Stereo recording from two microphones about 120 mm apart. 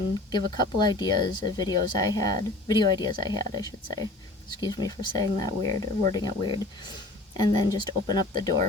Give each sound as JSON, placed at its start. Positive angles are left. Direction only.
{"t": 0.3, "sound": "speech", "side_deg": 40}